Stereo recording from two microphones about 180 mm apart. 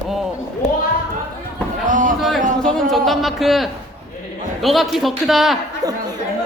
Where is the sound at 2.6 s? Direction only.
Centre (ahead or behind).